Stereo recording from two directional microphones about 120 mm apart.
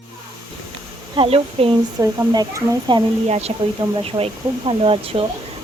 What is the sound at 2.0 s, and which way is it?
Speech, 25° right (ahead or behind).